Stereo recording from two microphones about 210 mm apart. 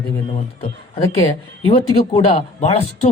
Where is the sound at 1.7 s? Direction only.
30° left (ahead or behind).